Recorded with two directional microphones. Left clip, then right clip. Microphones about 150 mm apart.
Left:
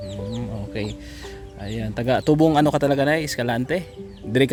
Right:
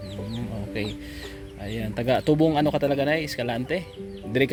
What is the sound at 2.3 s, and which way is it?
Speech, 30° left (ahead or behind).